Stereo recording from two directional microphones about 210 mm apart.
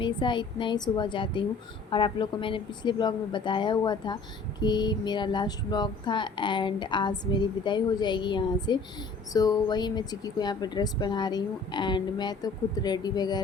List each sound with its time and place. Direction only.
0.0 s speech: 20° left (ahead or behind)